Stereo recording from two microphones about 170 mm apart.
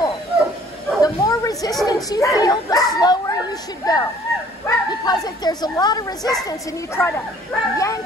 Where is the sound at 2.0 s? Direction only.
20° left (ahead or behind).